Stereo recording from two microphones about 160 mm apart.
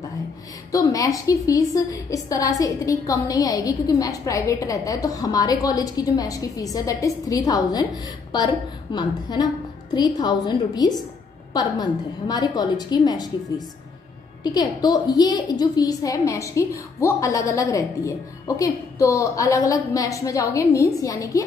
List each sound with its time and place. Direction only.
0.7 s a woman's voice: 20° left (ahead or behind)
8.9 s a woman's voice: 25° left (ahead or behind)
14.4 s a woman's voice: 25° left (ahead or behind)